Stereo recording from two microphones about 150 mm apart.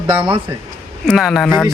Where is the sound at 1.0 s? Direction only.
Centre (ahead or behind).